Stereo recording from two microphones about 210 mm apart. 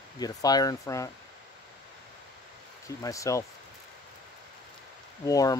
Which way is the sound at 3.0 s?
15° left (ahead or behind).